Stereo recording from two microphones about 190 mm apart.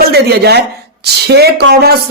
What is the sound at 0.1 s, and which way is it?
Speech, 60° right (ahead or behind).